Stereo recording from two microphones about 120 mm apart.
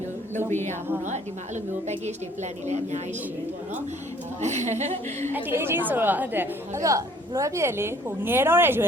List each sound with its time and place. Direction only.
0.3 s a woman's voice: 85° right
1.9 s a woman's voice: 70° right (ahead or behind)
4.4 s a woman's voice: 70° right (ahead or behind)
5.3 s a woman's voice: 20° right (ahead or behind)